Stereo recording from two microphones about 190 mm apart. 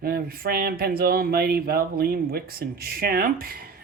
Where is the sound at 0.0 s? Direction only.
50° right (ahead or behind).